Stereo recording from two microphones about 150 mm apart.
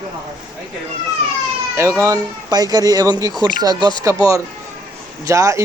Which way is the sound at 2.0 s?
25° right (ahead or behind).